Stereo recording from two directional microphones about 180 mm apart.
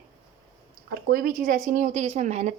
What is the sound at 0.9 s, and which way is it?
Speech, 60° right (ahead or behind).